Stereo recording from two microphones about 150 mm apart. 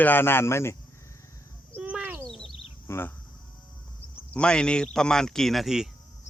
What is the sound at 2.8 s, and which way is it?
Speech, 15° left (ahead or behind).